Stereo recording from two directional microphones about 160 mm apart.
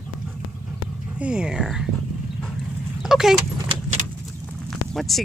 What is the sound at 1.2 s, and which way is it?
Speech, 5° right (ahead or behind).